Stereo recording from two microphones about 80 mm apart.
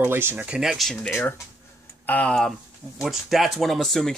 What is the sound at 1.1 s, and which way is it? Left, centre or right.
Speech, left.